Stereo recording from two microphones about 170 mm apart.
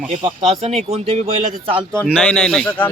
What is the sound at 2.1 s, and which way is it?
Speech, 5° left (ahead or behind).